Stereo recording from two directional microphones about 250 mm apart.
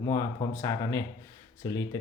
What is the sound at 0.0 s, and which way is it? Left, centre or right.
Speech, centre.